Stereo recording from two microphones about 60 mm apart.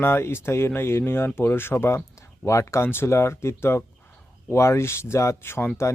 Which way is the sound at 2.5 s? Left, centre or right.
Left.